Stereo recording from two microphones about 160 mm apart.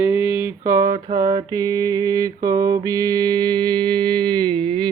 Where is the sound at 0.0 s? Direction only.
15° right (ahead or behind).